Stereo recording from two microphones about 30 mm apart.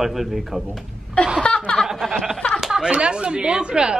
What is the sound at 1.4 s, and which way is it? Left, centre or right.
Chuckle, left.